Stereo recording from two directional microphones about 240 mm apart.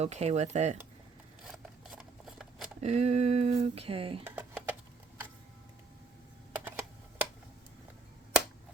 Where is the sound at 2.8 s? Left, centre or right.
Right.